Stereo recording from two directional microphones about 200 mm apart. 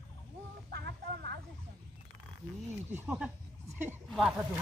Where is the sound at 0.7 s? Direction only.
55° right (ahead or behind).